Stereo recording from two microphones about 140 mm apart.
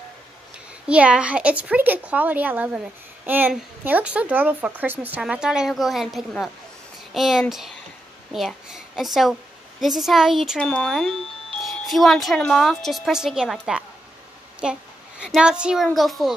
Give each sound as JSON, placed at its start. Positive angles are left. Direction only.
{"t": 0.8, "sound": "a woman's voice", "side_deg": -10}